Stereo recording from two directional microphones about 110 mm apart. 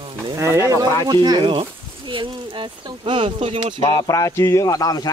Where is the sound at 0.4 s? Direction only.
25° right (ahead or behind).